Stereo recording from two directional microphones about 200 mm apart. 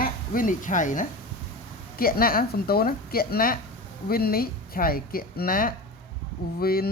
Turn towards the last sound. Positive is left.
turn(degrees=50)  # may be behind; listen again after turning